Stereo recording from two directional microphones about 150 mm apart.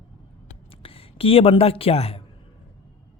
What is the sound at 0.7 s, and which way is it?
Speech, 40° left (ahead or behind).